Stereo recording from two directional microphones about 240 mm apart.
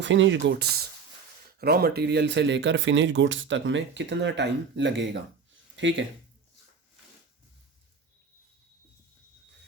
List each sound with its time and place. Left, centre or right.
0.0 s speech: right